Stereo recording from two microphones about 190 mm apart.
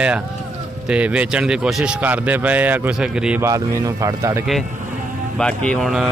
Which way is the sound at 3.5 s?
20° right (ahead or behind).